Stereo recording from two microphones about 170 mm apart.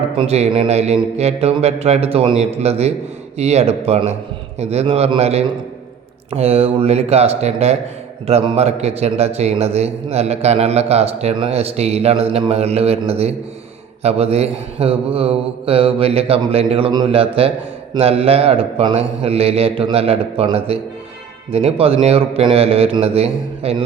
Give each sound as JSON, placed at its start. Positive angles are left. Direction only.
{"t": 0.2, "sound": "a man's voice", "side_deg": -40}